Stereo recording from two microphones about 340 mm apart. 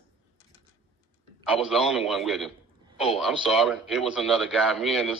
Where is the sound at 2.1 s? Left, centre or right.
Centre.